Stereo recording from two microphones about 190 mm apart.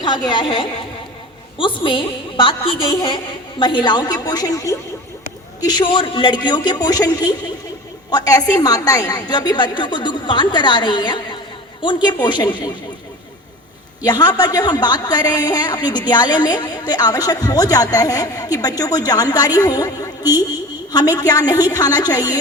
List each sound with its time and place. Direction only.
0.0 s a man's voice: 25° left (ahead or behind)
3.6 s a man's voice: 25° left (ahead or behind)
14.0 s a man's voice: 20° left (ahead or behind)